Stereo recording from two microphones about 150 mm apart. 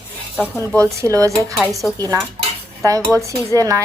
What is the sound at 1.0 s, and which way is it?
Cutlery, 20° right (ahead or behind).